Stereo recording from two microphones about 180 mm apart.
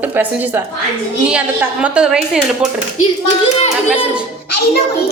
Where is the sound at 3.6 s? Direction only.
30° left (ahead or behind).